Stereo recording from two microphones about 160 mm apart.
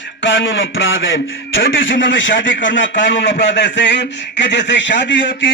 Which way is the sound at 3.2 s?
90° left.